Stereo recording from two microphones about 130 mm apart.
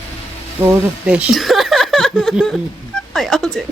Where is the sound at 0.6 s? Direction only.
20° right (ahead or behind).